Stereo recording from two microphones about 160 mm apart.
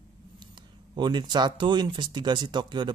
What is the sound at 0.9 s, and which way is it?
Speech, 30° right (ahead or behind).